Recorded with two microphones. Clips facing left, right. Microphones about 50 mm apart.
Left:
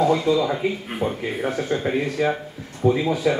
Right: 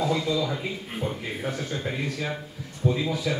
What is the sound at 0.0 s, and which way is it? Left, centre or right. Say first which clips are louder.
Speech: left 7 dB; left.